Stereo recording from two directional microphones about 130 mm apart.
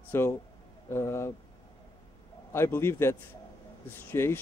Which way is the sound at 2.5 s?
20° left (ahead or behind).